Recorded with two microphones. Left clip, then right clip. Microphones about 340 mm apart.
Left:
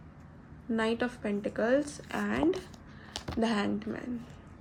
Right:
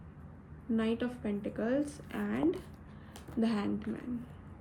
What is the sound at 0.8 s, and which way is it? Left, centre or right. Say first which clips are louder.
A woman's voice: left 5 dB; centre.